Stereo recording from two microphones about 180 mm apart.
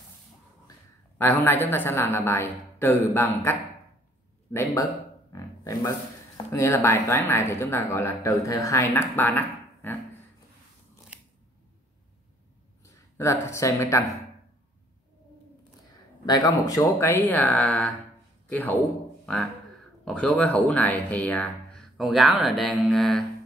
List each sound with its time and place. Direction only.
1.1 s speech: 10° left (ahead or behind)
11.1 s scissors: 5° right (ahead or behind)
12.8 s speech: 15° left (ahead or behind)
16.3 s speech: 20° left (ahead or behind); by 23.2 s centre (ahead or behind)